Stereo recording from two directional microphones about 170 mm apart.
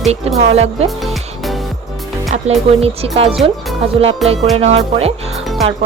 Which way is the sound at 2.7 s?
35° right (ahead or behind).